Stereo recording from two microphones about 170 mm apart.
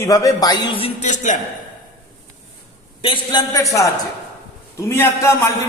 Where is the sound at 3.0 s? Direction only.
35° left (ahead or behind).